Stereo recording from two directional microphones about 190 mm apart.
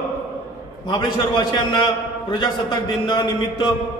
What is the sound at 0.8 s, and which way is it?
Speech, 25° left (ahead or behind).